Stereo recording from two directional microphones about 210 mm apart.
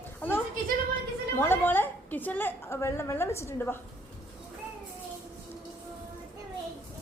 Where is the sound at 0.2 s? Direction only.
10° left (ahead or behind).